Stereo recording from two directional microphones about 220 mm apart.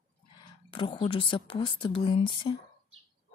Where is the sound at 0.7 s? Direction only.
25° left (ahead or behind).